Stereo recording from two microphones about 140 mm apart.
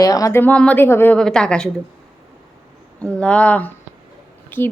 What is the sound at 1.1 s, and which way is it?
Speech, 5° left (ahead or behind).